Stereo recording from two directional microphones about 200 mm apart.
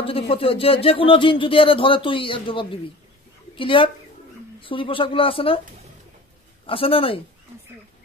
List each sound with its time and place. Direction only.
0.0 s speech: 25° left (ahead or behind)
6.6 s speech: 25° left (ahead or behind)